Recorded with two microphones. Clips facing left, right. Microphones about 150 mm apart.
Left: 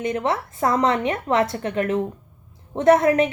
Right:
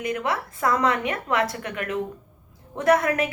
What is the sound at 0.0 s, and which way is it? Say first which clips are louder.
Speech: left 3 dB; 30° left (ahead or behind).